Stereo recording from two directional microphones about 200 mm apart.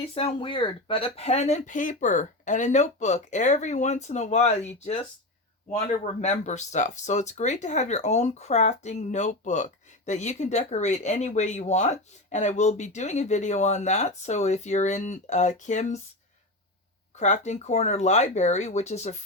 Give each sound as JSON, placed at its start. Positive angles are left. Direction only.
{"t": 0.0, "sound": "speech", "side_deg": 25}
{"t": 6.2, "sound": "speech", "side_deg": 35}
{"t": 17.2, "sound": "speech", "side_deg": 35}